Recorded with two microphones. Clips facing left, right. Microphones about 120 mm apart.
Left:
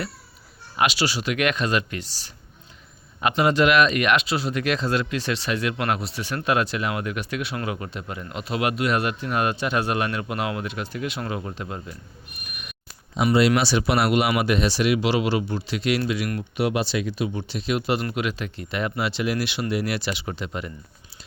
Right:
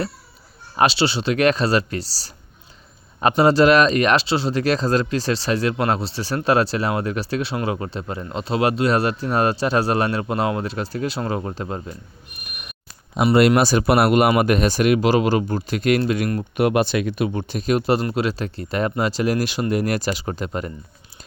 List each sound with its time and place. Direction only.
0.8 s speech: 30° right (ahead or behind)
13.2 s speech: 55° right (ahead or behind)